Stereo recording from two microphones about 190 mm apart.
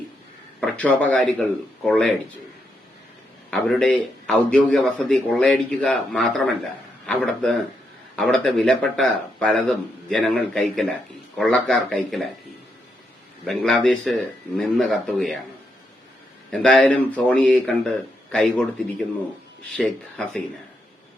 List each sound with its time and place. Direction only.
0.6 s a man's voice: 5° left (ahead or behind)
3.5 s a man's voice: 5° left (ahead or behind)
13.4 s a man's voice: centre (ahead or behind)
16.5 s a man's voice: 5° left (ahead or behind)